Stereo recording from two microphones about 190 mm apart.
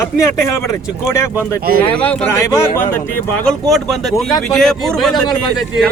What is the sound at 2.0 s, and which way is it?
Speech, 10° left (ahead or behind).